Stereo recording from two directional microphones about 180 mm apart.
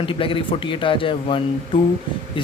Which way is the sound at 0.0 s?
30° left (ahead or behind).